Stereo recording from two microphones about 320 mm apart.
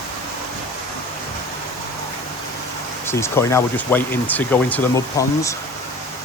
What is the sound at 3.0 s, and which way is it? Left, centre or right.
Speech, centre.